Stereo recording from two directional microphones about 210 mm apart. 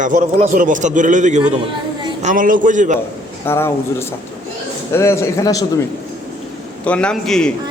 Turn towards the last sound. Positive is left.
turn(degrees=5)  # may be behind; listen again after turning